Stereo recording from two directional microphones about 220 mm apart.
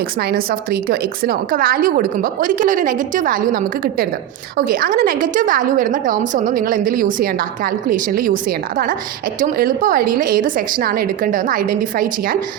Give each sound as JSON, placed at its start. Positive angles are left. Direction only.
{"t": 0.2, "sound": "a woman's voice", "side_deg": -45}